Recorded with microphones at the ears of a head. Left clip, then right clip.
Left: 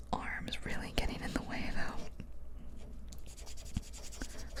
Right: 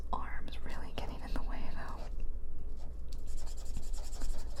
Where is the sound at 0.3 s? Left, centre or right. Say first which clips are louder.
Left 7 dB; left.